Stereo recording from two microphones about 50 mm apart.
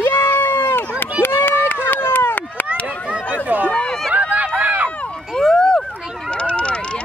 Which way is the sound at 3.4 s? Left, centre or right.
Right.